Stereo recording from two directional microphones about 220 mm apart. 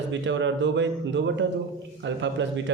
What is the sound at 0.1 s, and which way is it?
A man's voice, 55° right (ahead or behind).